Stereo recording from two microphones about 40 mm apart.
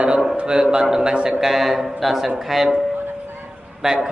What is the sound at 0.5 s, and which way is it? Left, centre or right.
Speech, centre.